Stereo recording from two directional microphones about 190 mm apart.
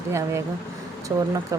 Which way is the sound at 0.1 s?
15° right (ahead or behind).